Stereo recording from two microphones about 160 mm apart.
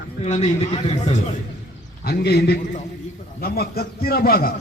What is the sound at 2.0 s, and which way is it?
Speech, 85° left.